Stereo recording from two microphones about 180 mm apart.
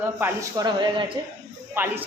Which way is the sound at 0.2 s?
10° right (ahead or behind).